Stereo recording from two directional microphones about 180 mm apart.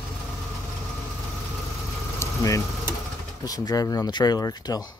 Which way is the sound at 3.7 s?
20° left (ahead or behind).